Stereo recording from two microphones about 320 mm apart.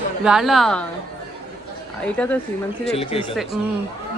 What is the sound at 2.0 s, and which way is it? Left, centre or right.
Speech, centre.